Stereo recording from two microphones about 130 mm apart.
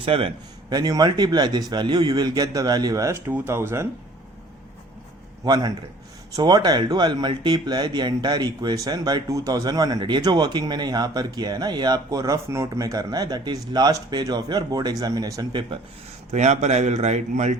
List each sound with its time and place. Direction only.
0.0 s a man's voice: 45° right (ahead or behind)
0.7 s a man's voice: 30° right (ahead or behind)
5.5 s speech: 30° right (ahead or behind)
16.3 s speech: 60° right (ahead or behind)